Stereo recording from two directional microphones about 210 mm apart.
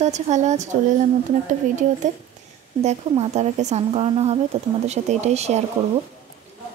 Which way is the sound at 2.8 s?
30° right (ahead or behind).